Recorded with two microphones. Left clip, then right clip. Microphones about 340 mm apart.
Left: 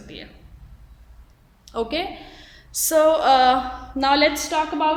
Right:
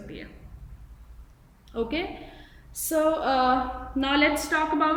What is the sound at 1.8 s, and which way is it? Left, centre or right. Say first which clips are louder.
Female singing: left 4 dB; centre.